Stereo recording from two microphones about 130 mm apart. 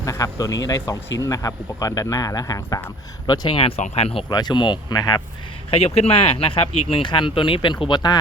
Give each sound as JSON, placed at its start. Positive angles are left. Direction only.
{"t": 0.0, "sound": "speech", "side_deg": 25}
{"t": 5.7, "sound": "speech", "side_deg": 50}